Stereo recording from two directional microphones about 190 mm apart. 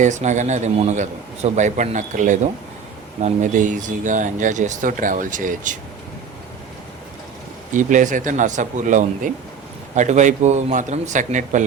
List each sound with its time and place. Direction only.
0.0 s a man's voice: 40° right (ahead or behind)
7.7 s a man's voice: 40° right (ahead or behind)